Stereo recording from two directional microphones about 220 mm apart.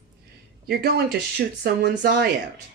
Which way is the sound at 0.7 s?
45° right (ahead or behind).